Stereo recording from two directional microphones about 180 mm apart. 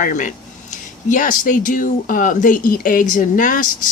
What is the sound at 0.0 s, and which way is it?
Speech, 45° left (ahead or behind).